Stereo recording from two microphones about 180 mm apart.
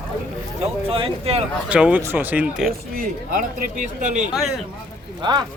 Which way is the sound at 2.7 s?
50° right (ahead or behind).